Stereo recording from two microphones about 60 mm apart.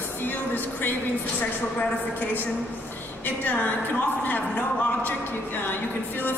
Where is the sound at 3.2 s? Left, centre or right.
Left.